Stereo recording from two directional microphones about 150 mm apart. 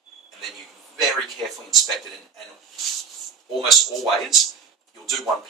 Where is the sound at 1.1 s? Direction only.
Centre (ahead or behind).